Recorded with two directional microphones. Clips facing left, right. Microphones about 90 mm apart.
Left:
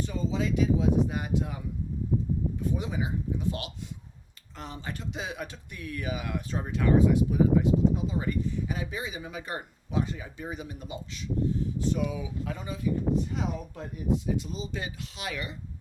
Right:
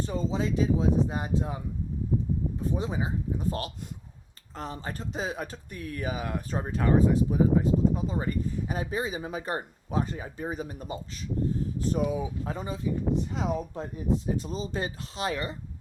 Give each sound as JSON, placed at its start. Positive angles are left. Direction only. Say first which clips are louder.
{"t": 0.0, "sound": "speech", "louder": "right 1 dB", "side_deg": -35}
{"t": 2.6, "sound": "speech", "louder": "right 1 dB", "side_deg": -35}